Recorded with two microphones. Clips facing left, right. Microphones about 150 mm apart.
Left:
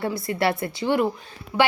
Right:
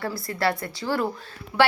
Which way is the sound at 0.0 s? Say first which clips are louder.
Left 2 dB; 25° left (ahead or behind).